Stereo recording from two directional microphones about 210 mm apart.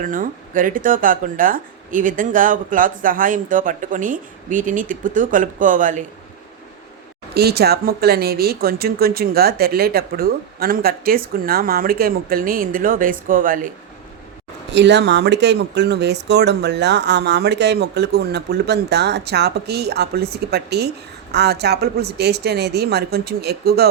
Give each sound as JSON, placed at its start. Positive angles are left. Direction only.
{"t": 0.0, "sound": "speech", "side_deg": -40}
{"t": 7.3, "sound": "speech", "side_deg": -50}
{"t": 14.7, "sound": "speech", "side_deg": -55}